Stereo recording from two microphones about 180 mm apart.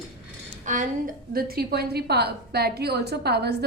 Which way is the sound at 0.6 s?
45° right (ahead or behind).